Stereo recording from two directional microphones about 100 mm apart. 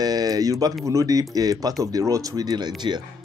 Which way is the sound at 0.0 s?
40° right (ahead or behind).